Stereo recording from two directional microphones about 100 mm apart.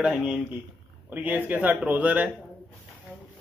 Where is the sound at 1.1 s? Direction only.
15° right (ahead or behind).